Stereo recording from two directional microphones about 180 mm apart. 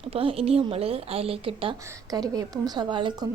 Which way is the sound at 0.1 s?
30° right (ahead or behind).